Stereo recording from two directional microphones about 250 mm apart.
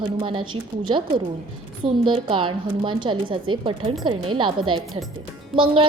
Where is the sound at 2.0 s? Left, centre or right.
Centre.